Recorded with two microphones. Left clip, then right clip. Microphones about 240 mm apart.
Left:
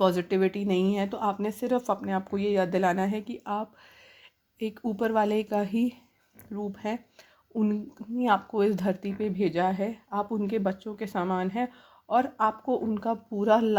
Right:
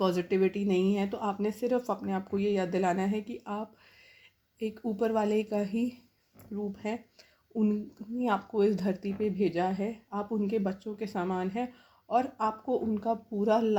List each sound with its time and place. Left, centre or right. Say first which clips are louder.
0.2 s speech: left 2 dB; left